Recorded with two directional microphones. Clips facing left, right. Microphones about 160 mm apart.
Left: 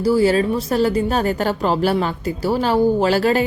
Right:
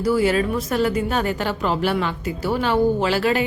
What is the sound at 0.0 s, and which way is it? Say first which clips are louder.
A woman's voice: left 3 dB; 30° left (ahead or behind).